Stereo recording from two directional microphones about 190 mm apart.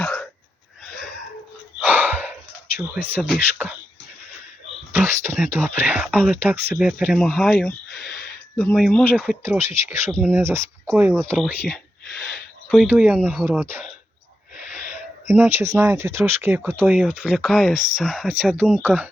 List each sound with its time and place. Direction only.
0.0 s hiccup: 5° left (ahead or behind)
1.8 s a sound: 10° right (ahead or behind)
2.7 s speech: 10° right (ahead or behind)
4.9 s whispering: 15° right (ahead or behind)
5.7 s speech: 10° right (ahead or behind)
8.1 s a sound: 55° left (ahead or behind)
8.5 s speech: 5° left (ahead or behind)
9.4 s speech: 15° right (ahead or behind)
11.1 s speech: 5° left (ahead or behind)
12.1 s a sound: 60° left (ahead or behind)
12.6 s speech: centre (ahead or behind)
13.1 s speech: 5° left (ahead or behind)
13.4 s speech: 10° right (ahead or behind)
15.3 s speech: 15° right (ahead or behind)